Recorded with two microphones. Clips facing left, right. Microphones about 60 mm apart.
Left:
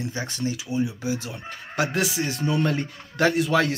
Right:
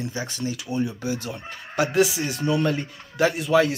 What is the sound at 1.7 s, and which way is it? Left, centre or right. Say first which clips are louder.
Speech: right 3 dB; left.